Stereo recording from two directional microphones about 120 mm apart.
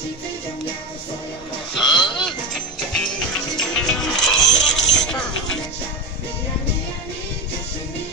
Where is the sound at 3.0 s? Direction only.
5° left (ahead or behind).